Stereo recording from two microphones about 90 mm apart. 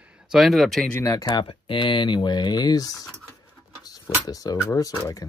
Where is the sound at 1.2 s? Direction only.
70° left (ahead or behind); by 3.0 s 45° left (ahead or behind).